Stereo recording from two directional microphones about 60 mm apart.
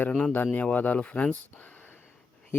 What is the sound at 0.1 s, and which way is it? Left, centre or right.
Speech, centre.